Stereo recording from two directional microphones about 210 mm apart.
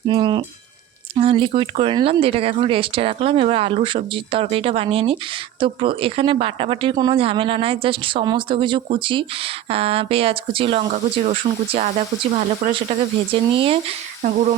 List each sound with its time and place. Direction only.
0.1 s speech: 20° right (ahead or behind)
13.5 s speech: 25° right (ahead or behind)
14.2 s a sound: 35° right (ahead or behind)